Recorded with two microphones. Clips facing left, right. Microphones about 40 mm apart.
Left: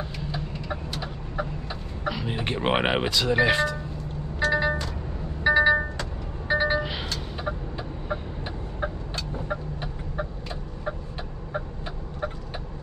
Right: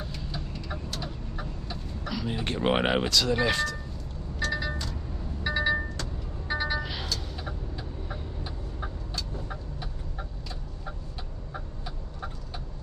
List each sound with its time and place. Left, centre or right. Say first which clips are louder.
0.2 s chicken: left 5 dB; centre
3.0 s speech: left 3 dB; left
4.4 s music: left 7 dB; left
5.4 s vehicle: left 8 dB; left
8.8 s fowl: left 7 dB; left